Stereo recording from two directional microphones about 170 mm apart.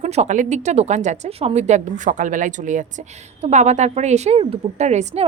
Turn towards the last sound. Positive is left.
turn(degrees=-40)  # may be behind; listen again after turning